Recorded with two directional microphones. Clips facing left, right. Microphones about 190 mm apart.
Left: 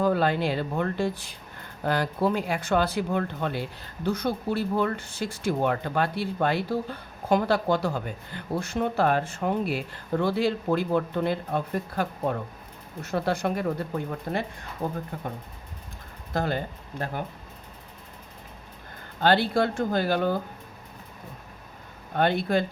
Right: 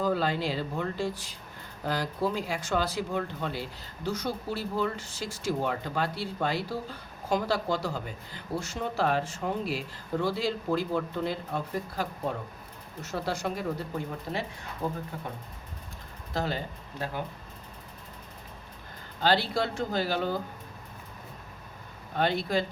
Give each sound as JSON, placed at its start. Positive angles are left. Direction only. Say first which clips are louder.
{"t": 0.0, "sound": "speech", "louder": "left 4 dB", "side_deg": 55}
{"t": 16.3, "sound": "speech", "louder": "left 4 dB", "side_deg": 55}
{"t": 19.2, "sound": "speech", "louder": "left 4 dB", "side_deg": 55}
{"t": 22.1, "sound": "speech", "louder": "left 4 dB", "side_deg": 55}